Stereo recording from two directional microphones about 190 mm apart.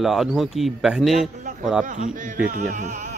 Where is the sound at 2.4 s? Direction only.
45° right (ahead or behind).